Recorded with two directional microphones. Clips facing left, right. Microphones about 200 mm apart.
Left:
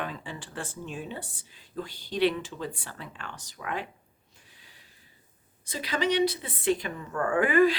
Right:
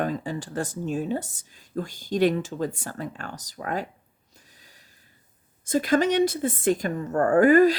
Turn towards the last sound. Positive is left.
turn(degrees=-40)  # may be behind; listen again after turning